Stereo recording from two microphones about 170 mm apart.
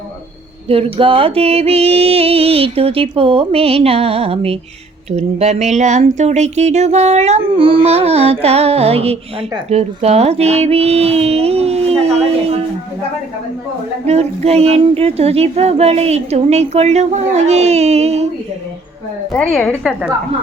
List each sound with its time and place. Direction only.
0.7 s speech: 35° right (ahead or behind)
14.1 s speech: 40° right (ahead or behind)
19.3 s a woman's voice: 5° left (ahead or behind)